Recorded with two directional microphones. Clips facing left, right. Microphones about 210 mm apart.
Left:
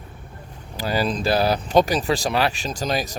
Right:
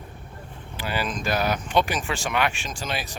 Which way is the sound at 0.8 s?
40° left (ahead or behind).